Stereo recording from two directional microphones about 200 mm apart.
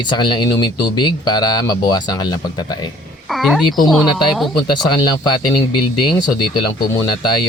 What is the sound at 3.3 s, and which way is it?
A woman's voice, centre (ahead or behind).